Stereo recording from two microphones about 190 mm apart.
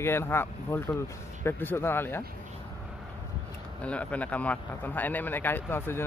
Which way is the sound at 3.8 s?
5° left (ahead or behind).